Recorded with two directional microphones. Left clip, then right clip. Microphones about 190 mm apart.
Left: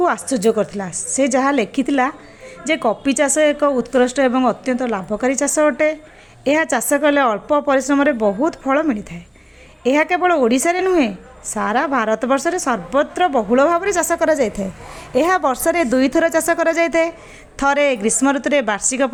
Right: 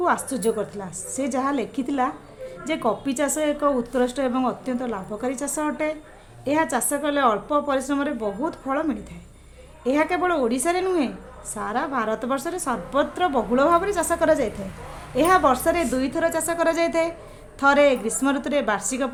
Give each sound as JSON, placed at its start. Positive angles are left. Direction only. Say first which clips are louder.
{"t": 0.0, "sound": "a woman's voice", "louder": "left 6 dB", "side_deg": 25}